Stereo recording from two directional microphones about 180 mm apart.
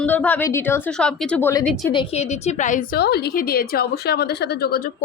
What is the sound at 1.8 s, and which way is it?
A woman's voice, 25° left (ahead or behind).